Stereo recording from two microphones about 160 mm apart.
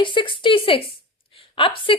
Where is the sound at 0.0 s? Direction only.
30° left (ahead or behind).